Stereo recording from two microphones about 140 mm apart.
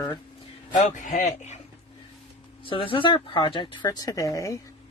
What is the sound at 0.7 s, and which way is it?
Speech, 60° left (ahead or behind).